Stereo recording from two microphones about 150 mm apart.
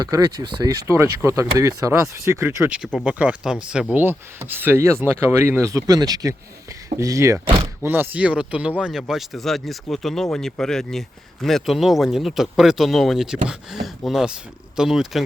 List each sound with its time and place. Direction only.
0.0 s speech: 25° right (ahead or behind)
2.7 s speech: 5° right (ahead or behind)